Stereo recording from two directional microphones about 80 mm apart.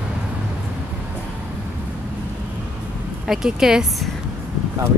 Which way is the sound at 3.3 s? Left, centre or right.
Centre.